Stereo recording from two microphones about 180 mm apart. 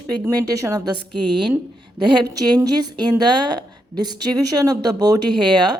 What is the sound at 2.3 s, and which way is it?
Speech, 20° right (ahead or behind).